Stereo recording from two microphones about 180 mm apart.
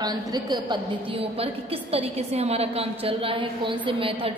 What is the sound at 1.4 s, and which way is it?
A woman's voice, 35° right (ahead or behind).